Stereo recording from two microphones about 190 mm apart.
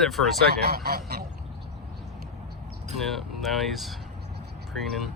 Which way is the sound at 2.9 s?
Centre (ahead or behind).